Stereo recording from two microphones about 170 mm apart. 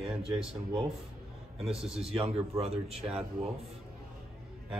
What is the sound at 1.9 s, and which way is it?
Speech, 35° right (ahead or behind).